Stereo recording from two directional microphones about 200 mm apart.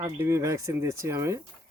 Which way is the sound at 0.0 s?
15° right (ahead or behind).